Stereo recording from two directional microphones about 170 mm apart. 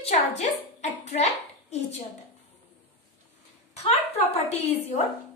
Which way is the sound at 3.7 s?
35° left (ahead or behind).